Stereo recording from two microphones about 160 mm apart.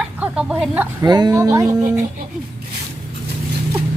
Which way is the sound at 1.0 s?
25° right (ahead or behind).